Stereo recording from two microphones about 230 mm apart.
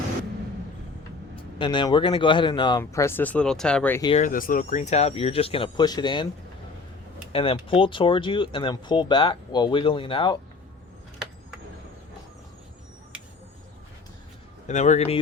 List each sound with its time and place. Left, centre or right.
1.4 s speech: left
4.2 s speech: left; by 6.2 s centre
7.3 s speech: left
14.7 s speech: left